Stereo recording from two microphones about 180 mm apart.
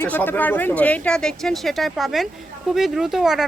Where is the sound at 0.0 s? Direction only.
10° left (ahead or behind).